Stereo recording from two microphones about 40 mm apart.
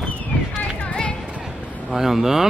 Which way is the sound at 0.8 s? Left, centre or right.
Left.